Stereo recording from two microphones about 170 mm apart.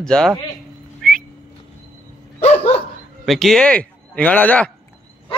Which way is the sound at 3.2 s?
Centre (ahead or behind).